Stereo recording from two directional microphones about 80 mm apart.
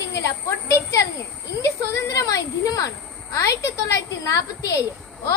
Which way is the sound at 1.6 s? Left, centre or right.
Left.